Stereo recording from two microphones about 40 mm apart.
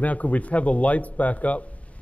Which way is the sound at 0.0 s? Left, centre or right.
Left.